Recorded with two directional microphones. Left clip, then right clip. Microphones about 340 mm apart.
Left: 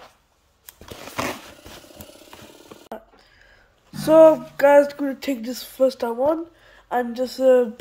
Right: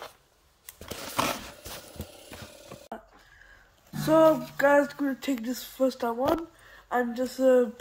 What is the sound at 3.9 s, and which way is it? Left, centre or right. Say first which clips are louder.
Speech: left 8 dB; left.